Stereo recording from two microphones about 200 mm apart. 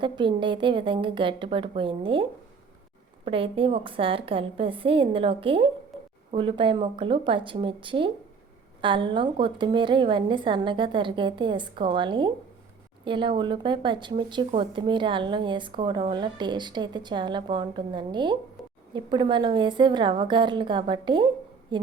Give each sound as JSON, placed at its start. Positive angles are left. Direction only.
{"t": 0.0, "sound": "speech", "side_deg": -25}
{"t": 3.2, "sound": "a woman's voice", "side_deg": -25}